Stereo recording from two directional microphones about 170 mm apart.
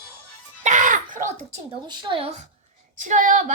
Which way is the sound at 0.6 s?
50° right (ahead or behind).